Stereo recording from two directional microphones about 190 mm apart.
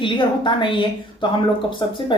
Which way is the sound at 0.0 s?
25° left (ahead or behind).